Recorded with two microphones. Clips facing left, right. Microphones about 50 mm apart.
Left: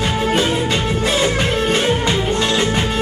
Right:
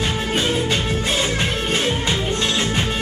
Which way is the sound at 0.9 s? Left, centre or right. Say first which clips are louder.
Left 4 dB; left.